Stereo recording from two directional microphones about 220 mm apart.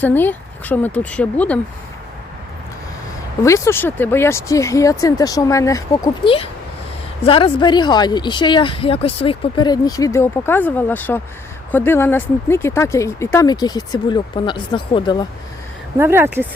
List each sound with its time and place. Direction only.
0.0 s speech: 10° left (ahead or behind)
3.4 s speech: 15° left (ahead or behind)
16.0 s speech: 10° right (ahead or behind)